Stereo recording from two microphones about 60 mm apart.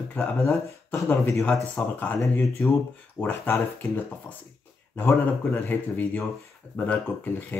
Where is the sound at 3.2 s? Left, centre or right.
Left.